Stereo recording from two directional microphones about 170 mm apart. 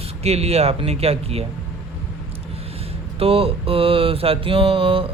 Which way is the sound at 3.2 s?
35° right (ahead or behind).